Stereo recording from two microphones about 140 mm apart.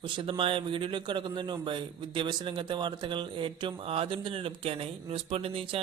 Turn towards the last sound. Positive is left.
turn(degrees=-40)  # may be behind; listen again after turning